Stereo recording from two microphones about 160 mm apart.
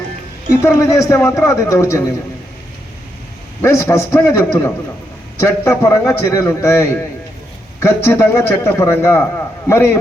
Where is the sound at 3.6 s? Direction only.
15° left (ahead or behind).